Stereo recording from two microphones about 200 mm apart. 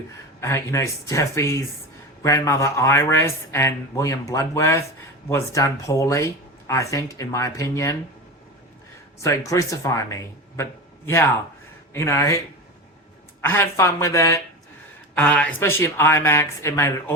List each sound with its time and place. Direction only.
0.3 s speech: 15° left (ahead or behind)
9.2 s speech: 15° left (ahead or behind)
13.4 s speech: 15° left (ahead or behind)